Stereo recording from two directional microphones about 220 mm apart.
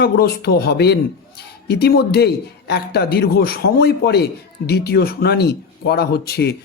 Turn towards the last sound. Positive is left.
turn(degrees=45)  # may be behind; listen again after turning